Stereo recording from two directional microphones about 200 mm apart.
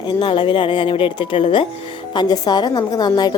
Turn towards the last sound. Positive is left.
turn(degrees=20)  # may be behind; listen again after turning